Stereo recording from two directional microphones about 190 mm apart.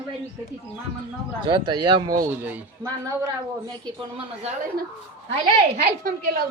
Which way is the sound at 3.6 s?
25° right (ahead or behind).